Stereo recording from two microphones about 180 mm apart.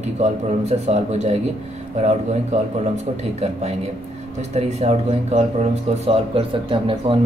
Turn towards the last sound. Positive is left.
turn(degrees=-30)  # may be behind; listen again after turning